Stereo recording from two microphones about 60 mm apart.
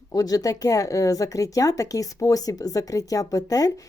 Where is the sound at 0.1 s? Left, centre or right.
Left.